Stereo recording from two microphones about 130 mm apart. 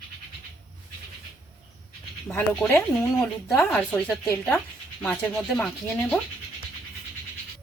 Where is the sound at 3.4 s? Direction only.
Centre (ahead or behind).